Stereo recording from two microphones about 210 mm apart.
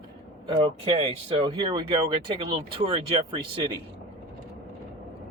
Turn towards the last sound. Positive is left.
turn(degrees=-25)  # may be behind; listen again after turning